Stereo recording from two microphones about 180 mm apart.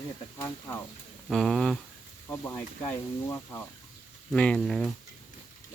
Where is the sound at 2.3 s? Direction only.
15° left (ahead or behind).